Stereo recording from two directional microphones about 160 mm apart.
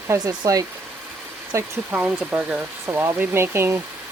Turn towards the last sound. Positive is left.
turn(degrees=-15)  # may be behind; listen again after turning